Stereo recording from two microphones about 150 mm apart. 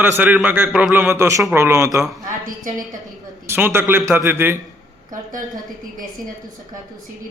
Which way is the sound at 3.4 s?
15° right (ahead or behind).